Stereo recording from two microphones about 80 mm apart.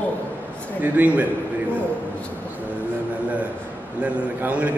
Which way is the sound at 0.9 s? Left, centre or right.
Right.